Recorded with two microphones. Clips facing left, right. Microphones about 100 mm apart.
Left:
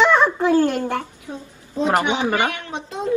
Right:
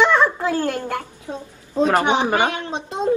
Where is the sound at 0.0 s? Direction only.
20° left (ahead or behind).